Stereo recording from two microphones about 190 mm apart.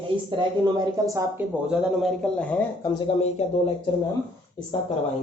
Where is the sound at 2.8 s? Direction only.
25° left (ahead or behind).